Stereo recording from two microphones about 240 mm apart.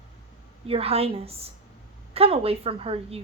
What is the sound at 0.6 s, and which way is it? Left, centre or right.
Speech, right.